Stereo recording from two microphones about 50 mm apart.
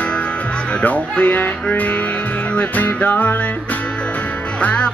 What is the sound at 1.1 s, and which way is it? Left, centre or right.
Music, left.